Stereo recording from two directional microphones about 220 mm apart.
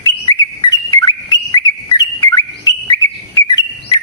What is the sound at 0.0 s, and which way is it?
Bird, 15° left (ahead or behind).